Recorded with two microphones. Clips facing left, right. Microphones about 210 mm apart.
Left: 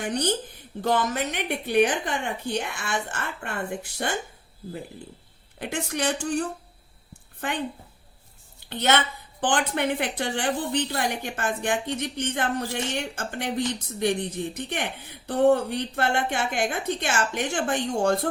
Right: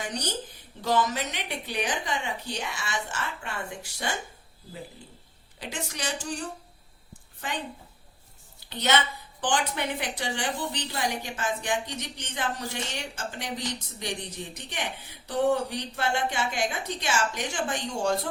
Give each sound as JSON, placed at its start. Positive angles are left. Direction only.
{"t": 0.0, "sound": "a woman's voice", "side_deg": 55}
{"t": 5.5, "sound": "a woman's voice", "side_deg": 55}
{"t": 7.4, "sound": "a woman's voice", "side_deg": 60}
{"t": 8.7, "sound": "a woman's voice", "side_deg": 55}